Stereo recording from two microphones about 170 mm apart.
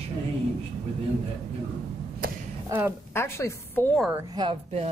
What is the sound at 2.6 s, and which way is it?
Speech, 15° right (ahead or behind).